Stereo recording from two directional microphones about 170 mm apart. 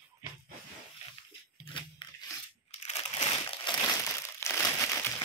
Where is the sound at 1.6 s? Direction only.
30° left (ahead or behind).